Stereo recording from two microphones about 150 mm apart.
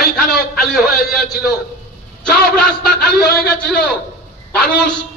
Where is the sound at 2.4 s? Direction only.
90° left.